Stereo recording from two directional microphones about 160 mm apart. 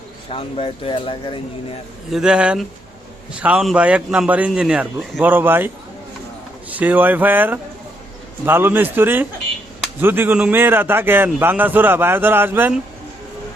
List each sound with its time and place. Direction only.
0.3 s speech: 35° left (ahead or behind)
2.0 s a man's voice: 5° right (ahead or behind)